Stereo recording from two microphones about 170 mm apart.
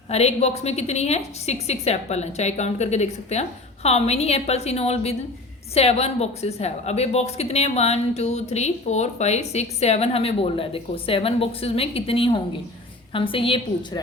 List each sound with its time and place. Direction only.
0.1 s speech: 40° left (ahead or behind)